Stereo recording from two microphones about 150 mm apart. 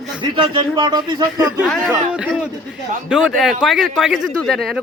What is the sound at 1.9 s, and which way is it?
A man's voice, 10° right (ahead or behind).